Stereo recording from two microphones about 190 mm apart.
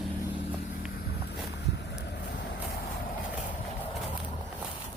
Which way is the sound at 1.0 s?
60° left (ahead or behind).